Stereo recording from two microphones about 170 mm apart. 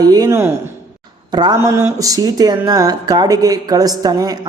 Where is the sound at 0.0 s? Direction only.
20° right (ahead or behind).